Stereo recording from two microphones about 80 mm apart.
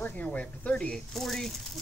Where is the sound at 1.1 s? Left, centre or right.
Centre.